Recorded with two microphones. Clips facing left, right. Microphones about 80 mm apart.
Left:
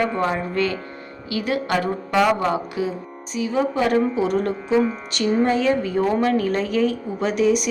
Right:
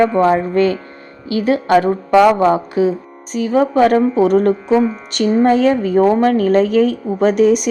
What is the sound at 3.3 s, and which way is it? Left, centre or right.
A woman's voice, right.